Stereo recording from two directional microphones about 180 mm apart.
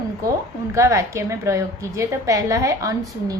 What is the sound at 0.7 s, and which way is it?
A woman's voice, 15° right (ahead or behind).